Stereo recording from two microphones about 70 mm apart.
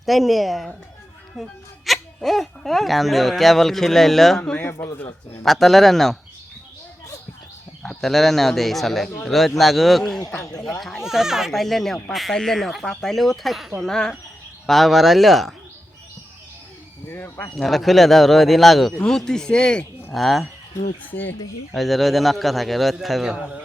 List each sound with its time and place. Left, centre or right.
0.0 s speech: centre
7.8 s speech: centre
17.1 s speech: left
17.6 s speech: centre
20.1 s speech: centre
21.0 s speech: left
21.8 s speech: centre